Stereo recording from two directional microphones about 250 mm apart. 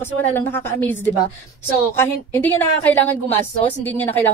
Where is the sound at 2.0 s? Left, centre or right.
Centre.